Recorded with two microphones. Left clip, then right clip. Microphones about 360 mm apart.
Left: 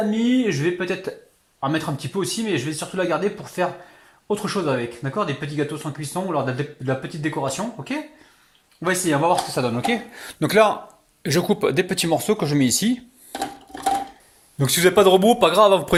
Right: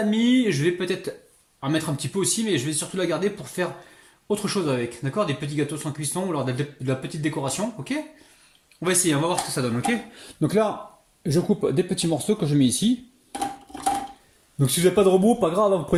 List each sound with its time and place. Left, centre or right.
0.3 s speech: centre
10.4 s a man's voice: left
14.6 s a man's voice: centre
14.9 s speech: left
15.2 s a man's voice: left